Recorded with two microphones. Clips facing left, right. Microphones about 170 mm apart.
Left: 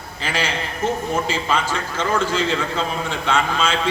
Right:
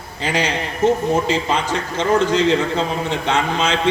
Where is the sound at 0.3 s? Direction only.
20° right (ahead or behind).